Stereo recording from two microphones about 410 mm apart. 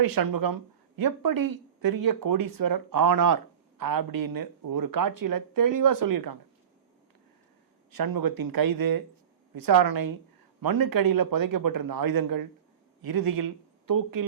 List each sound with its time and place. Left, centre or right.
0.0 s speech: right
7.9 s a man's voice: right